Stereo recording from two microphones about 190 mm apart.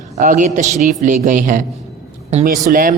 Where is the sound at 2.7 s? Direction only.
50° right (ahead or behind).